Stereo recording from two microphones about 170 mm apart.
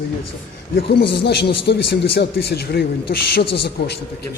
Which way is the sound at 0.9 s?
75° left (ahead or behind).